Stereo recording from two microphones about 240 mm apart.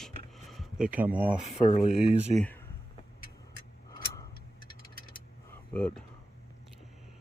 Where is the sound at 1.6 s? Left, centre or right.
Left.